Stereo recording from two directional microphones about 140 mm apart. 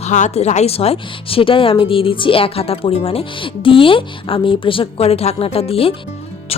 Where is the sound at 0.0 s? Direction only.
55° left (ahead or behind).